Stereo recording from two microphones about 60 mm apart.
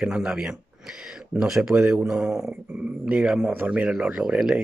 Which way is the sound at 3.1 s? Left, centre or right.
Centre.